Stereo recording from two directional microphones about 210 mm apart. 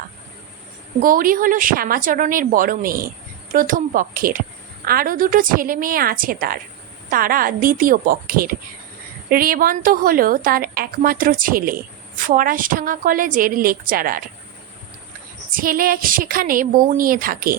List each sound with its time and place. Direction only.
1.0 s a woman's voice: 40° right (ahead or behind)
15.5 s a woman's voice: 45° right (ahead or behind)